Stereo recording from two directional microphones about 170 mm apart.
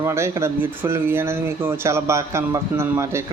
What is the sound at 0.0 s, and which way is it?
Speech, 15° right (ahead or behind).